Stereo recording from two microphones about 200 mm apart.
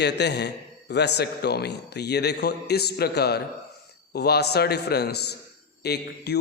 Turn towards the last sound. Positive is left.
turn(degrees=55)  # may be behind; listen again after turning